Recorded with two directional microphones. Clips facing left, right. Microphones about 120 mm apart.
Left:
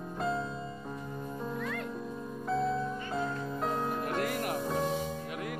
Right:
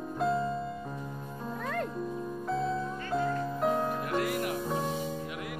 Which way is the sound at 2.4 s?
Centre (ahead or behind).